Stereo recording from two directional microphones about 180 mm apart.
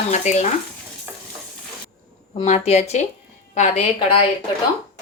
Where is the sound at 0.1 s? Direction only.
40° left (ahead or behind).